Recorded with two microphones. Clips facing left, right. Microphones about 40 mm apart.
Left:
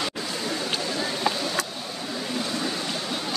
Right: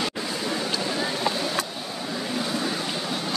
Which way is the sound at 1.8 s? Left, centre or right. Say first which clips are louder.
Right 1 dB; centre.